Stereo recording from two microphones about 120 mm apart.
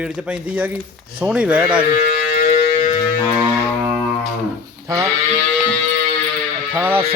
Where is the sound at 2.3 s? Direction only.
70° left (ahead or behind).